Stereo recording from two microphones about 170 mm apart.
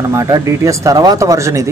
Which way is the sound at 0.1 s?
15° right (ahead or behind).